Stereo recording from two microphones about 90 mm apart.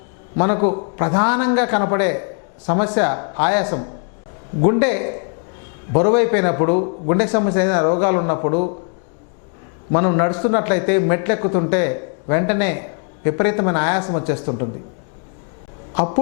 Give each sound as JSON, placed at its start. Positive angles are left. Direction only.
{"t": 0.3, "sound": "a man's voice", "side_deg": 20}
{"t": 9.9, "sound": "a man's voice", "side_deg": 20}